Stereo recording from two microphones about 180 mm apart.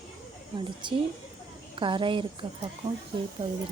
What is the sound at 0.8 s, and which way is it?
Speech, 25° right (ahead or behind).